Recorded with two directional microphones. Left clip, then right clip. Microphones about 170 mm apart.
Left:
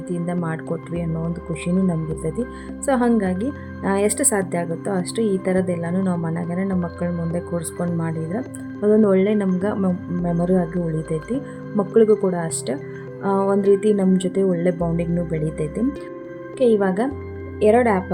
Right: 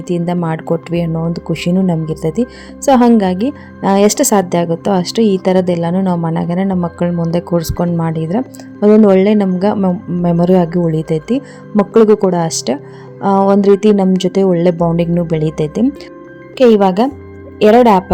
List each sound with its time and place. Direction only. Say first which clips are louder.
0.1 s a woman's voice: right 9 dB; 40° right (ahead or behind)